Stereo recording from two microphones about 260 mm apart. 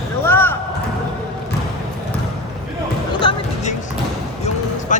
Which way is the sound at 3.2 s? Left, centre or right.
Centre.